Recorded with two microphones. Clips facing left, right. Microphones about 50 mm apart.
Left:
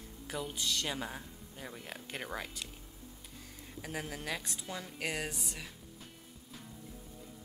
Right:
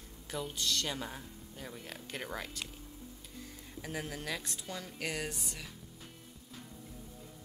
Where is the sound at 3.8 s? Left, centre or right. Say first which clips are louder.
Even; centre.